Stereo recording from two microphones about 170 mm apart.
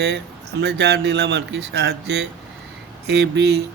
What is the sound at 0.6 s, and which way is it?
Speech, 80° right.